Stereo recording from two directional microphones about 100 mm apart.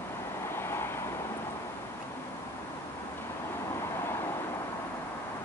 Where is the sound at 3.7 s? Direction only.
25° left (ahead or behind).